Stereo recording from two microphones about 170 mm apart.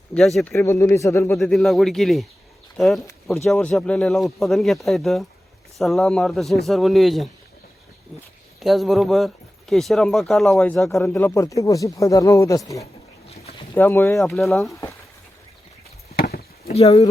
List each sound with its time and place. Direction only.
0.1 s speech: centre (ahead or behind)
0.5 s speech: 15° left (ahead or behind)
1.4 s speech: centre (ahead or behind)
8.6 s speech: centre (ahead or behind)
11.0 s speech: 15° left (ahead or behind)
13.3 s a sound: 35° left (ahead or behind)
13.7 s speech: 15° left (ahead or behind)
14.2 s speech: centre (ahead or behind)
16.1 s chop: 65° left (ahead or behind)
16.6 s speech: 35° left (ahead or behind)